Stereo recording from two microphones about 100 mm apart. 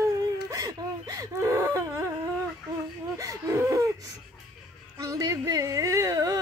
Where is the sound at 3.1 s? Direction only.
35° right (ahead or behind).